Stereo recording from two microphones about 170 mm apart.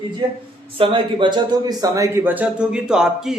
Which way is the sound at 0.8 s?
30° right (ahead or behind).